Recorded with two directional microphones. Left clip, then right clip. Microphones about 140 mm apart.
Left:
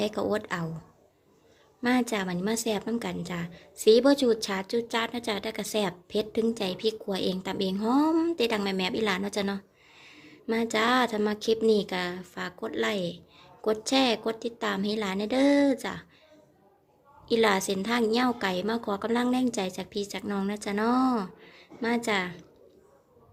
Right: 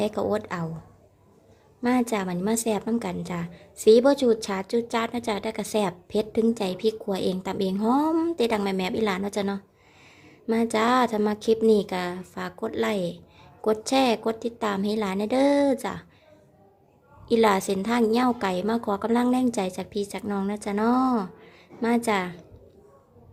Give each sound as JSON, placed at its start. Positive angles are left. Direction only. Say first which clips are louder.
{"t": 0.0, "sound": "a woman's voice", "louder": "right 3 dB", "side_deg": -5}
{"t": 1.8, "sound": "a woman's voice", "louder": "right 2 dB", "side_deg": -5}
{"t": 17.2, "sound": "a woman's voice", "louder": "right 3 dB", "side_deg": -10}